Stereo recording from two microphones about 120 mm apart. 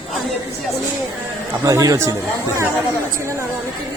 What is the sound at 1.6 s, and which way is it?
Speech, 30° right (ahead or behind).